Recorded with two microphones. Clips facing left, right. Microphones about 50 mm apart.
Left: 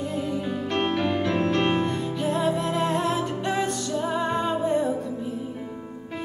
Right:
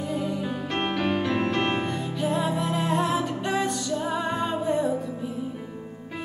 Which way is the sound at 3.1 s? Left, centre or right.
Centre.